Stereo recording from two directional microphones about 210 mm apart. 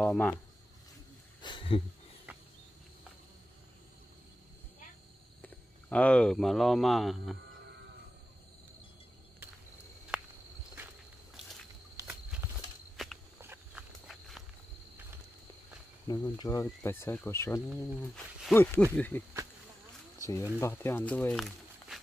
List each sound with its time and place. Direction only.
0.0 s speech: 5° left (ahead or behind)
1.4 s a sound: 25° left (ahead or behind)
2.3 s cricket: 10° right (ahead or behind)
5.4 s speech: 5° left (ahead or behind)
12.0 s a sound: 15° right (ahead or behind)
12.4 s horse: 10° right (ahead or behind)
12.9 s walk: centre (ahead or behind)
16.1 s speech: 20° left (ahead or behind)
20.2 s a sound: 15° left (ahead or behind)
20.5 s speech: 10° left (ahead or behind)